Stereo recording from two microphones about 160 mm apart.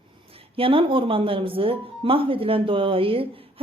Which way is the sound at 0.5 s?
35° right (ahead or behind).